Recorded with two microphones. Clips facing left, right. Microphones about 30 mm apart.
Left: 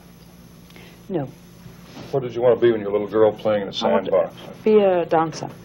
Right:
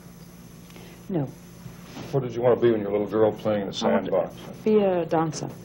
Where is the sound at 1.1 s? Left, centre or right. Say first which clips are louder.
Left 2 dB; centre.